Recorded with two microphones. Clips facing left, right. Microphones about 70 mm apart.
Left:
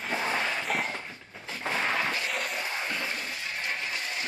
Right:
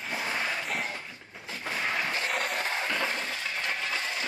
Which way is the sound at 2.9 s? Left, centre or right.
Right.